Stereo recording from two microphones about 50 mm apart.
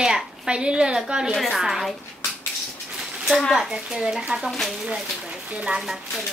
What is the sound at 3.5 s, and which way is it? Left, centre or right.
Speech, centre.